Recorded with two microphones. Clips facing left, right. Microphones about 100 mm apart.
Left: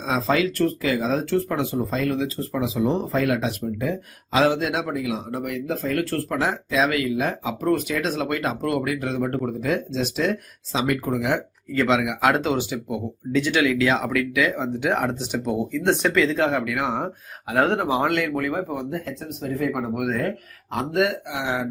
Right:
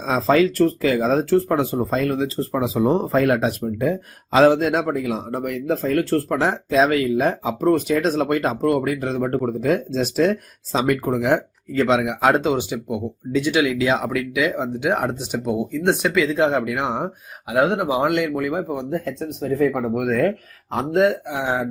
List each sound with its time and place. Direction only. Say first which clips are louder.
0.0 s speech: right 5 dB; 40° right (ahead or behind)
11.8 s speech: right 2 dB; 25° right (ahead or behind)
16.5 s speech: right 2 dB; 25° right (ahead or behind)
18.9 s speech: right 5 dB; 35° right (ahead or behind)